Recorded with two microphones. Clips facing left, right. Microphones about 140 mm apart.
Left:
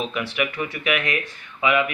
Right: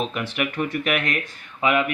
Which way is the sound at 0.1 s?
45° right (ahead or behind).